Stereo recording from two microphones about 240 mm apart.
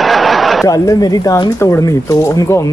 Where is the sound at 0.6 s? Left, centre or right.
Centre.